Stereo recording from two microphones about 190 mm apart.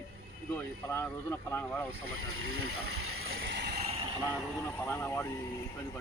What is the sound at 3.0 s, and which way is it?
Vehicle, 90° right.